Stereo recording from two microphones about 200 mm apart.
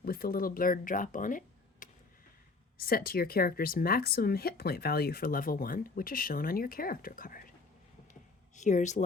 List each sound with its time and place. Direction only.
0.0 s speech: 45° left (ahead or behind)
8.5 s speech: 35° left (ahead or behind)